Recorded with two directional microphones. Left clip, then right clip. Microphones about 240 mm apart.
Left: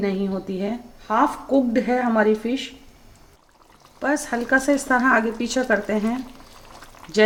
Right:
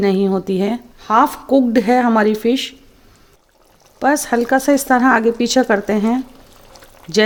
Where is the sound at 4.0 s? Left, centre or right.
Right.